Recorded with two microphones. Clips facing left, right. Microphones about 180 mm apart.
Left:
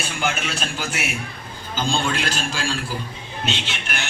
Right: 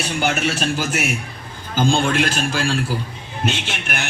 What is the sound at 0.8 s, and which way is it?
A man's voice, 45° right (ahead or behind).